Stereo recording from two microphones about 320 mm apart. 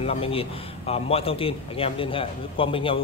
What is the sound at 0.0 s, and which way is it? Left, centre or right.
A man's voice, centre.